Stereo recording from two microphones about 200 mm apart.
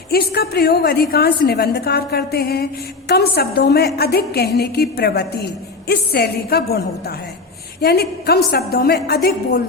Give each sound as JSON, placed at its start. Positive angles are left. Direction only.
{"t": 0.1, "sound": "a woman's voice", "side_deg": 50}
{"t": 7.8, "sound": "a woman's voice", "side_deg": 55}